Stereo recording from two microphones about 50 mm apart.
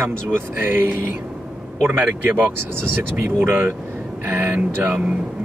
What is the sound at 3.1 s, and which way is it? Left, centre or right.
Speech, right.